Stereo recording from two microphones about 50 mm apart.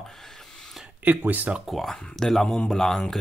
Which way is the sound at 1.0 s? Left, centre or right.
Right.